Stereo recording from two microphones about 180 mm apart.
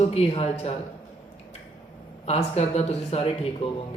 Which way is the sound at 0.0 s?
35° left (ahead or behind).